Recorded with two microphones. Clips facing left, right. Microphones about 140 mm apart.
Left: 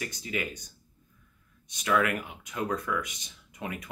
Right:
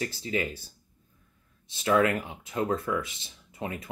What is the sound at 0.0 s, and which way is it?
Speech, 30° right (ahead or behind).